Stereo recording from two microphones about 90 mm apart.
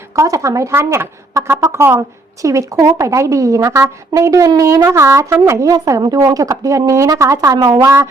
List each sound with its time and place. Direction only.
0.2 s a woman's voice: 35° right (ahead or behind)
5.7 s a woman's voice: 50° right (ahead or behind)